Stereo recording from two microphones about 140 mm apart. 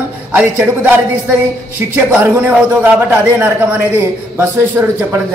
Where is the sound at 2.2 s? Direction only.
10° right (ahead or behind).